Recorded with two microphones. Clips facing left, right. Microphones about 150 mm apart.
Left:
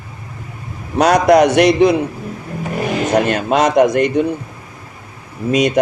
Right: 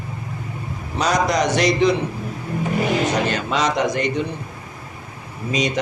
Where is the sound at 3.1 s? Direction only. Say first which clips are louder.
Left 7 dB; 55° left (ahead or behind).